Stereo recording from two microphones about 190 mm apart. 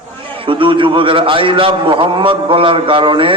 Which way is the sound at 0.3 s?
25° right (ahead or behind).